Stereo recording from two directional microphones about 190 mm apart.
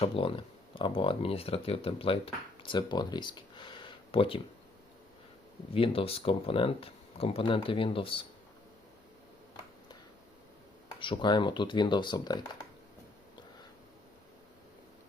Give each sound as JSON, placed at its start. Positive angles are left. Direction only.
{"t": 0.0, "sound": "speech", "side_deg": 30}
{"t": 5.7, "sound": "speech", "side_deg": 30}
{"t": 11.0, "sound": "speech", "side_deg": 25}